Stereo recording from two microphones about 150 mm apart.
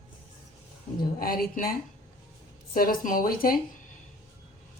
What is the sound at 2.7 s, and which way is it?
Speech, 70° left (ahead or behind).